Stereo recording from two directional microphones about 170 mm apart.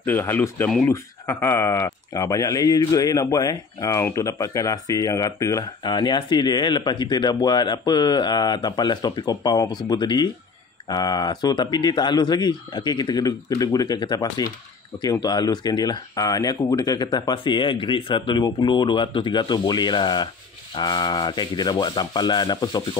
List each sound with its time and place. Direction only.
0.0 s speech: 10° left (ahead or behind)